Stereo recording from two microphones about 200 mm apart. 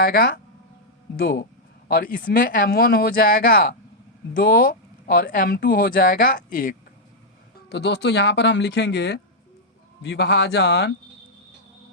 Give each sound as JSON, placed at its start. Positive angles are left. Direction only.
{"t": 0.0, "sound": "speech", "side_deg": 50}
{"t": 1.9, "sound": "speech", "side_deg": 45}
{"t": 7.7, "sound": "speech", "side_deg": 60}